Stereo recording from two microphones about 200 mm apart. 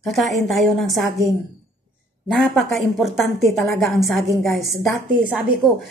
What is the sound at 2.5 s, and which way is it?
A woman's voice, centre (ahead or behind).